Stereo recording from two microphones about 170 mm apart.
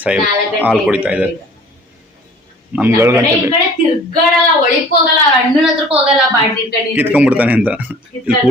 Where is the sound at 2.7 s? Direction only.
15° right (ahead or behind).